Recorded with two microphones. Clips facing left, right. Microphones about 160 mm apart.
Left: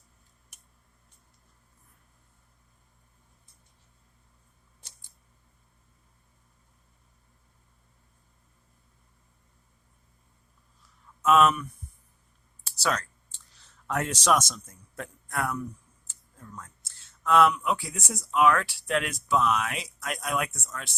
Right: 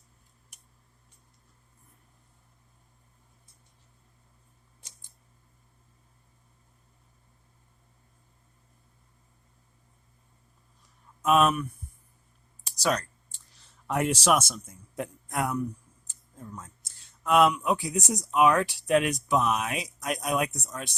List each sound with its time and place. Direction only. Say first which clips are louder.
11.2 s speech: left 1 dB; 15° right (ahead or behind)
12.6 s a sound: right 2 dB; 15° right (ahead or behind)
13.8 s a man's voice: right 2 dB; 10° right (ahead or behind)